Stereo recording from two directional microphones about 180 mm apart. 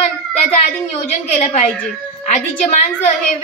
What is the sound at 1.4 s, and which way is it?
A woman's voice, 40° left (ahead or behind).